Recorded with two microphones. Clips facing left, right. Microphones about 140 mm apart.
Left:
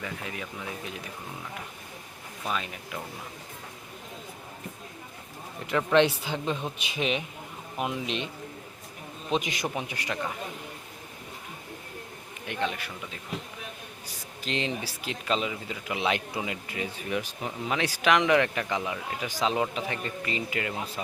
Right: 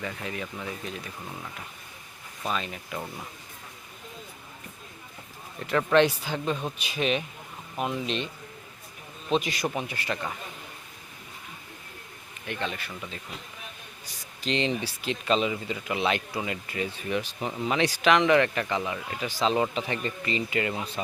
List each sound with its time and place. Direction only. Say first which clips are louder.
0.0 s speech: right 2 dB; 5° left (ahead or behind)
2.4 s speech: right 1 dB; 5° left (ahead or behind)
5.6 s speech: right 1 dB; 20° left (ahead or behind)
9.3 s speech: right 2 dB; 15° left (ahead or behind)
12.5 s speech: left 2 dB; 15° left (ahead or behind)
14.4 s speech: right 4 dB; 5° left (ahead or behind)
16.0 s speech: even; 15° left (ahead or behind)